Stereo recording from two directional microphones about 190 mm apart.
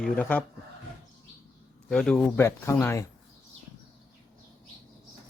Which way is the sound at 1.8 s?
5° left (ahead or behind).